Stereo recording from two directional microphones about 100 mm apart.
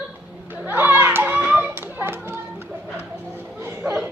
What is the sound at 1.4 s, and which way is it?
Children playing, 15° right (ahead or behind).